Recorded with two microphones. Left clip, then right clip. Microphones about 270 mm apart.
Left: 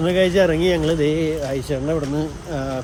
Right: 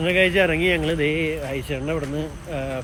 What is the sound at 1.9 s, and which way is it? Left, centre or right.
Speech, centre.